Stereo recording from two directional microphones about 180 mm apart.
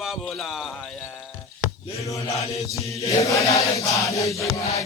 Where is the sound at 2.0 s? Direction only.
20° left (ahead or behind).